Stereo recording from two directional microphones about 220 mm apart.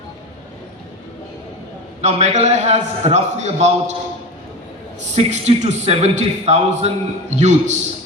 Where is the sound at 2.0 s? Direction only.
30° right (ahead or behind).